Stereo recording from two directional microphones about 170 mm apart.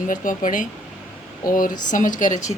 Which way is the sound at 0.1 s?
50° left (ahead or behind).